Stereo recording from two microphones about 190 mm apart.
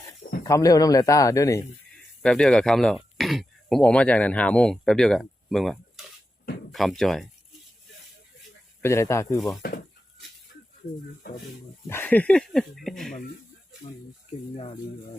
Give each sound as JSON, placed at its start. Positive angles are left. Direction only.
{"t": 0.4, "sound": "speech", "side_deg": 20}
{"t": 2.2, "sound": "speech", "side_deg": 5}
{"t": 8.8, "sound": "speech", "side_deg": 15}
{"t": 9.6, "sound": "speech", "side_deg": 50}
{"t": 11.9, "sound": "speech", "side_deg": 10}
{"t": 14.5, "sound": "speech", "side_deg": 30}